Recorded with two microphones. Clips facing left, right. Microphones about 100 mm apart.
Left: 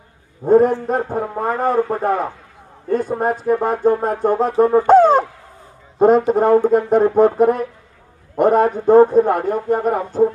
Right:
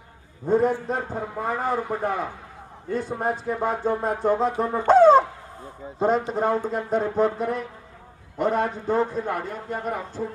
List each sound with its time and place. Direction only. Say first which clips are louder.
0.5 s speech: left 8 dB; 50° left (ahead or behind)